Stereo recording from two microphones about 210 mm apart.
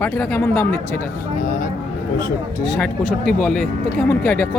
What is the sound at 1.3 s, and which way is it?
Vehicle, 35° left (ahead or behind).